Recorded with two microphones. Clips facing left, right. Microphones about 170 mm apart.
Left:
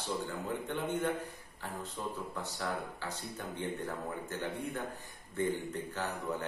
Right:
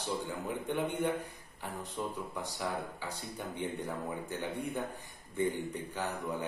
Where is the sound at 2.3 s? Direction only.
15° right (ahead or behind).